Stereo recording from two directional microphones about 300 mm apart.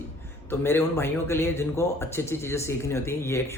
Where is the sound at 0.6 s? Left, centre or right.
Centre.